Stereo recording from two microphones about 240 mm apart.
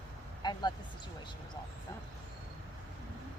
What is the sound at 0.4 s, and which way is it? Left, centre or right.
Vehicle, centre.